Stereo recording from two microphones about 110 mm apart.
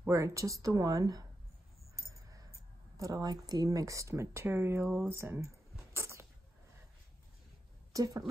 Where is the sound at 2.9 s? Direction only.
30° right (ahead or behind).